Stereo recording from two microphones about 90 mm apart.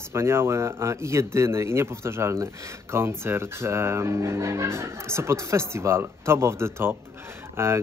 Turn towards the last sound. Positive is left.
turn(degrees=-25)  # may be behind; listen again after turning